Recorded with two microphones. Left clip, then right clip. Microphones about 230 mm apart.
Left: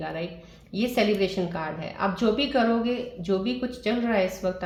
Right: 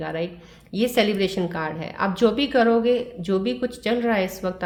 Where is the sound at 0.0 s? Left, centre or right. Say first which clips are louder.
Right 4 dB; right.